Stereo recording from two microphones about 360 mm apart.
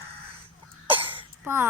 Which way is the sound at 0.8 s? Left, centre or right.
Centre.